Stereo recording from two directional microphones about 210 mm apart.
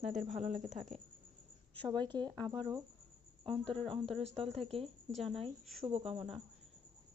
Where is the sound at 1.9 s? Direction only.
20° right (ahead or behind).